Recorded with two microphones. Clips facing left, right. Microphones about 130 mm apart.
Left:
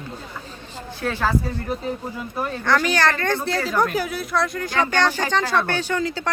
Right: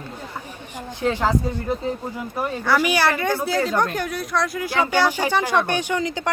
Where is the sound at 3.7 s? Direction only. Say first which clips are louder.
Left 1 dB; 5° left (ahead or behind).